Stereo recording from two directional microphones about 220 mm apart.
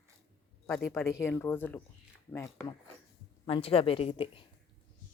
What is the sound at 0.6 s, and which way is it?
Speech, 10° left (ahead or behind).